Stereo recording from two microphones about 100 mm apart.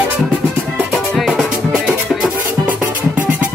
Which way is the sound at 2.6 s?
20° right (ahead or behind).